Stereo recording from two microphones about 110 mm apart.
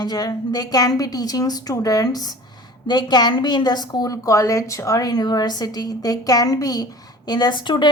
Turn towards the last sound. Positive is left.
turn(degrees=45)  # may be behind; listen again after turning